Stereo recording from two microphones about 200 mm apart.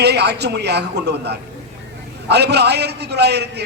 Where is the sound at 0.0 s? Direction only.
55° right (ahead or behind).